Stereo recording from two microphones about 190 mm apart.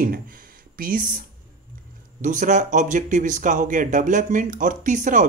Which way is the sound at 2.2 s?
40° right (ahead or behind).